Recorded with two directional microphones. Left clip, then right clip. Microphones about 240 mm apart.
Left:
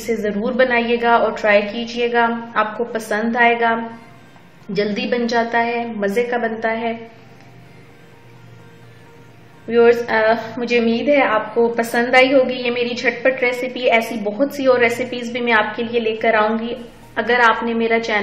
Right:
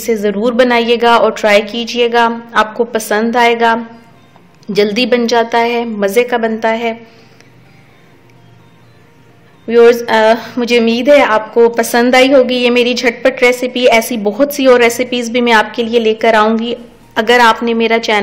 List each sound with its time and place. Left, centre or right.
0.1 s a woman's voice: right
4.7 s a woman's voice: right
9.7 s a woman's voice: right